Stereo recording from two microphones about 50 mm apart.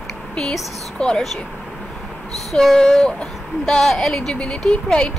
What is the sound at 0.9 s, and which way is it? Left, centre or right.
Speech, centre.